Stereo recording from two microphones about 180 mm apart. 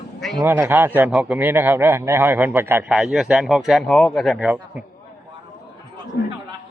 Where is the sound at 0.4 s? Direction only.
10° right (ahead or behind).